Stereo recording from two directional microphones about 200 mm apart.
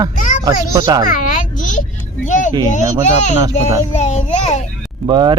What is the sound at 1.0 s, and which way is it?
A child's voice, 40° left (ahead or behind).